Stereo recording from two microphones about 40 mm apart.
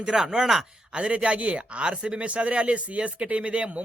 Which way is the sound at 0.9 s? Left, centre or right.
Right.